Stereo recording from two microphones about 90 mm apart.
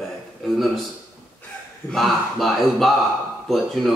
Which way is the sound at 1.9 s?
Centre (ahead or behind).